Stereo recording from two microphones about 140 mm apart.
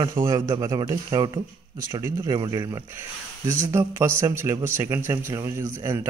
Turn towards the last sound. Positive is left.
turn(degrees=-20)  # may be behind; listen again after turning